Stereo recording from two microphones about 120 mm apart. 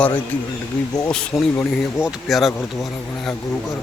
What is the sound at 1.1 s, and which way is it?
Speech, 5° left (ahead or behind).